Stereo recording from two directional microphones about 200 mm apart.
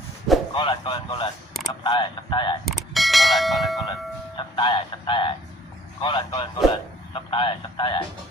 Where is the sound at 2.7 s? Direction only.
Centre (ahead or behind).